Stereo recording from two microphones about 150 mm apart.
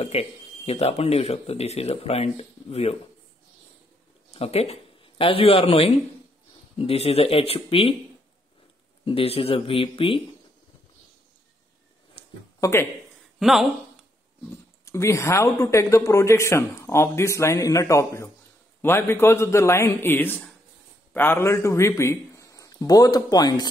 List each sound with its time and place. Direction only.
0.0 s speech: 40° left (ahead or behind)
4.3 s speech: 45° left (ahead or behind)
9.0 s speech: 40° left (ahead or behind)
12.5 s a sound: 20° left (ahead or behind)
13.4 s speech: centre (ahead or behind)
14.9 s a man's voice: 20° left (ahead or behind)